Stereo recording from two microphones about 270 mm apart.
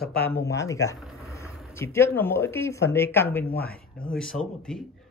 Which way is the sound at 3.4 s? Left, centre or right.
Left.